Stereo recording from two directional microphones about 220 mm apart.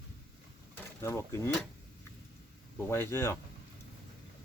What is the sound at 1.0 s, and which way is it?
Speech, 10° left (ahead or behind).